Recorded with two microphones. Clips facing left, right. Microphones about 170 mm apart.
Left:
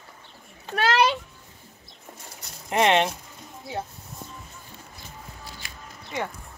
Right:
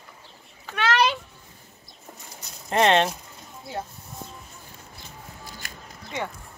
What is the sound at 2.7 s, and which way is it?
Speech, 15° left (ahead or behind).